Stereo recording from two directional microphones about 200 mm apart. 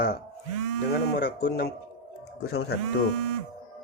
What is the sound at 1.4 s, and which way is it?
A man's voice, 50° left (ahead or behind).